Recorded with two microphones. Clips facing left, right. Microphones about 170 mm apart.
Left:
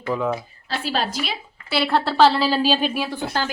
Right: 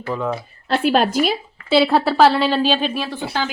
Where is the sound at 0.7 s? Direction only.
60° right (ahead or behind).